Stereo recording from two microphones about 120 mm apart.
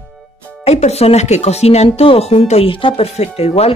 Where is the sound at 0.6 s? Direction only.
65° left (ahead or behind).